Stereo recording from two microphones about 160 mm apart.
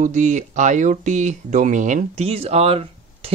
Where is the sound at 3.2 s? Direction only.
40° right (ahead or behind).